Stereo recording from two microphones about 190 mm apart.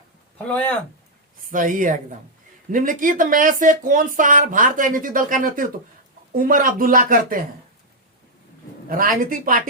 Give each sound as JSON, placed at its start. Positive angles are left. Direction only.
{"t": 0.3, "sound": "speech", "side_deg": 5}
{"t": 1.5, "sound": "speech", "side_deg": -45}
{"t": 8.9, "sound": "speech", "side_deg": -45}